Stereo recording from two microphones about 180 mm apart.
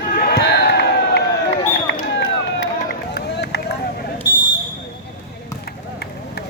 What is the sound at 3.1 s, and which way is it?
Run, 65° left (ahead or behind).